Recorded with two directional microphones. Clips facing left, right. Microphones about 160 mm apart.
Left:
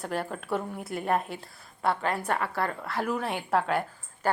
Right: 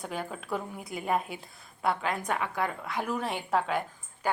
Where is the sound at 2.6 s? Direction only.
10° right (ahead or behind).